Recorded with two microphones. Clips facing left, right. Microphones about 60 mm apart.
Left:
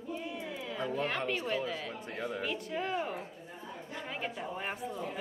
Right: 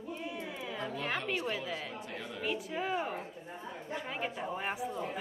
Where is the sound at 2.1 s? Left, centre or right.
Left.